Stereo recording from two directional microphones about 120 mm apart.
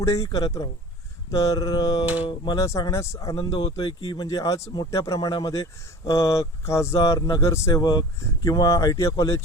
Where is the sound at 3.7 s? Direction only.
35° left (ahead or behind).